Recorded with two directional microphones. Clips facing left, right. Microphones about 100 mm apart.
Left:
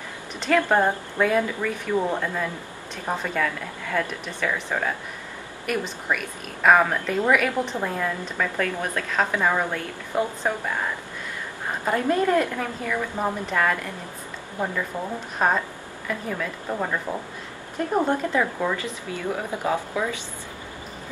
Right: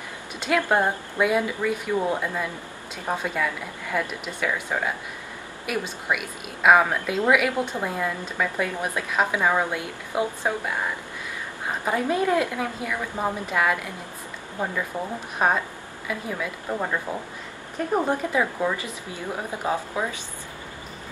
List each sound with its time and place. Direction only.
0.4 s a woman's voice: 10° right (ahead or behind)
11.8 s a woman's voice: 10° right (ahead or behind)
14.6 s speech: 20° right (ahead or behind)
15.3 s a woman's voice: 10° right (ahead or behind)
18.0 s a woman's voice: 10° right (ahead or behind)